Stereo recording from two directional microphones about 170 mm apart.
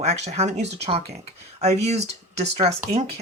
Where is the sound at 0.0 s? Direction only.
40° right (ahead or behind).